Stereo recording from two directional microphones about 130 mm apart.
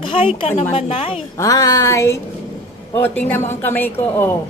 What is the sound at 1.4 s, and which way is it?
Speech, 25° left (ahead or behind).